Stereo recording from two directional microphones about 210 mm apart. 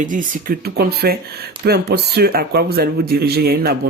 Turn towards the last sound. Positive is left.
turn(degrees=-45)  # may be behind; listen again after turning